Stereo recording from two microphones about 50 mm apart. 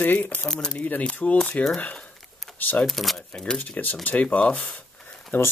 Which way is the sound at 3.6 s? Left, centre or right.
Left.